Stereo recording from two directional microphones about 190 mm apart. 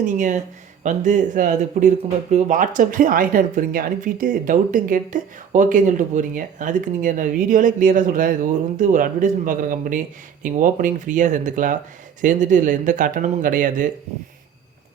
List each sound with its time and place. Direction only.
0.0 s speech: 40° right (ahead or behind)